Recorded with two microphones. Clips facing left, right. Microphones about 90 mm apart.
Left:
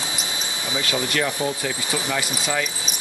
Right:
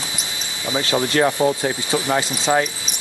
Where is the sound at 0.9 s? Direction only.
40° right (ahead or behind).